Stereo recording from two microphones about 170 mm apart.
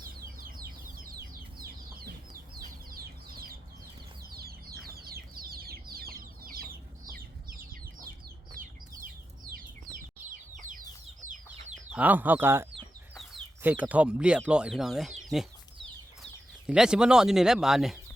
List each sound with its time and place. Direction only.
0.0 s chicken: 60° right (ahead or behind)
4.3 s bird flight: 65° right (ahead or behind)
4.9 s chicken: 65° right (ahead or behind)
8.6 s a sound: 55° right (ahead or behind)
10.5 s chicken: 50° right (ahead or behind)
11.7 s speech: 5° right (ahead or behind)
16.6 s speech: 5° right (ahead or behind)